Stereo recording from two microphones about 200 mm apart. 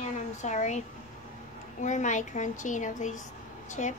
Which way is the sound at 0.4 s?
35° left (ahead or behind).